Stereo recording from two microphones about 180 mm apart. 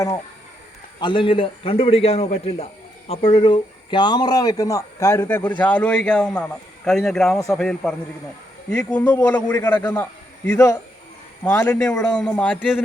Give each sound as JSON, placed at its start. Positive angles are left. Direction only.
{"t": 0.9, "sound": "a man's voice", "side_deg": 25}